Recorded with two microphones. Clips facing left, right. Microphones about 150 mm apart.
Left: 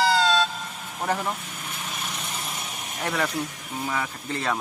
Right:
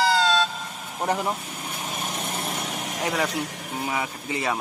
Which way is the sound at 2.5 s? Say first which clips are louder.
Right 5 dB; 75° right (ahead or behind).